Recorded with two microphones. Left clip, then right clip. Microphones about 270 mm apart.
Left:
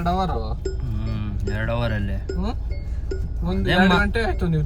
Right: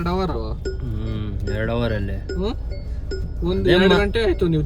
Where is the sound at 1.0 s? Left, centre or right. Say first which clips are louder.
Right 1 dB; centre.